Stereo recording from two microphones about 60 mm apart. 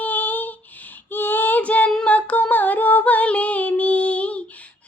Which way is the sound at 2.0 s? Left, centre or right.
Left.